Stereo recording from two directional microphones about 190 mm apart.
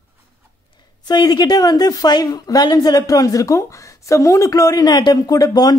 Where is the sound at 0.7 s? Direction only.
20° left (ahead or behind).